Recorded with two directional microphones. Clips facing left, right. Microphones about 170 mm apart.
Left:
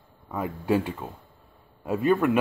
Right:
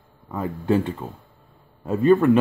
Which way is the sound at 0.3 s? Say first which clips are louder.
Right 3 dB; 10° left (ahead or behind).